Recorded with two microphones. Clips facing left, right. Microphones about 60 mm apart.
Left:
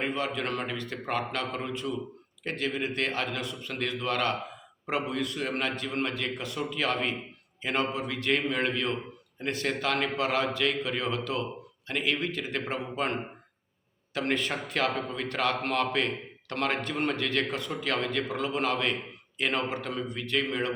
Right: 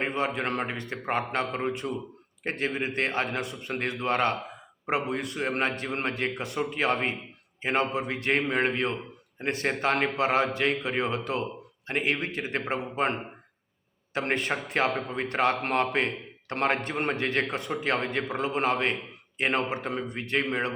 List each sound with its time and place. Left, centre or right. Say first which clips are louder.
0.0 s a man's voice: right 2 dB; right